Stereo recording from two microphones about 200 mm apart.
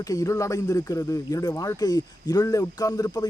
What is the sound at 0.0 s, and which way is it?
Speech, 15° left (ahead or behind).